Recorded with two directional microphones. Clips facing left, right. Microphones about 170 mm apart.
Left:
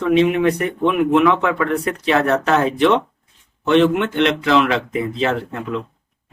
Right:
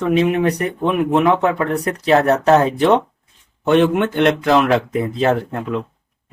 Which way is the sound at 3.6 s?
50° right (ahead or behind).